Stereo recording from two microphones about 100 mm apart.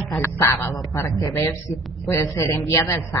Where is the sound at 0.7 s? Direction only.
40° left (ahead or behind).